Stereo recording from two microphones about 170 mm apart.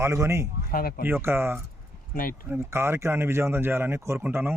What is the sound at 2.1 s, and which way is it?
Speech, 55° left (ahead or behind).